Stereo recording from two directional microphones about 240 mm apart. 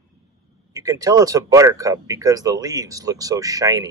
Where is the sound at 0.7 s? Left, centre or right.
Centre.